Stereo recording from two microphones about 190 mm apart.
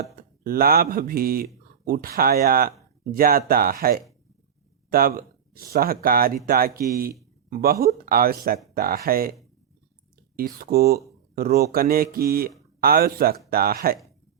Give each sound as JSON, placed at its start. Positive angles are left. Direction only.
{"t": 0.2, "sound": "speech", "side_deg": -50}
{"t": 10.3, "sound": "speech", "side_deg": -50}